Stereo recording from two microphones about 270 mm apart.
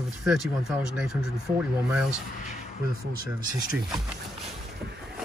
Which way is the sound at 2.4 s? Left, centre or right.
Left.